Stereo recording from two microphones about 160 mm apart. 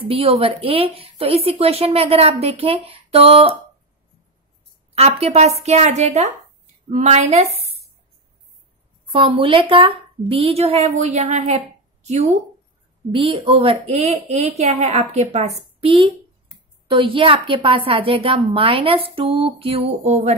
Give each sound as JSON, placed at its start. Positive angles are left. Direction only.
{"t": 0.1, "sound": "a woman's voice", "side_deg": -35}
{"t": 4.9, "sound": "a woman's voice", "side_deg": -40}
{"t": 9.1, "sound": "a woman's voice", "side_deg": -35}